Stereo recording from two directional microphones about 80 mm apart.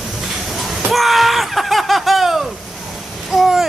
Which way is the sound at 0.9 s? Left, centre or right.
Centre.